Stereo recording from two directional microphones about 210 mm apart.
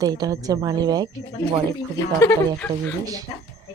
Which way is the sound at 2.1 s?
10° left (ahead or behind).